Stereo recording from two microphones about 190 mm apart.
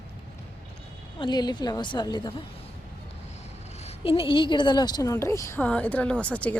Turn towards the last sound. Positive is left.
turn(degrees=5)  # may be behind; listen again after turning